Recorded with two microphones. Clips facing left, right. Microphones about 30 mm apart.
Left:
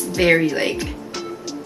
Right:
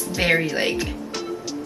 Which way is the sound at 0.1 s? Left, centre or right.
Centre.